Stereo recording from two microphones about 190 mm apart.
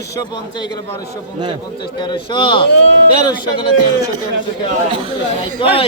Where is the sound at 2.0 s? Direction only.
25° left (ahead or behind).